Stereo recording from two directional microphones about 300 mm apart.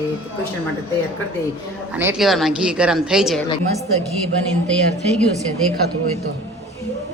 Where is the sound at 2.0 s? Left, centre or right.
Centre.